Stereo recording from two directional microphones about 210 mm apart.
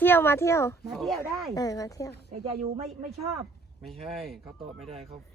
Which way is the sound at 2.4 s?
30° right (ahead or behind).